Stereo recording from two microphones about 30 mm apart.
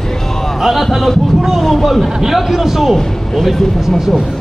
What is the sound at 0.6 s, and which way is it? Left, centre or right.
A man's voice, centre.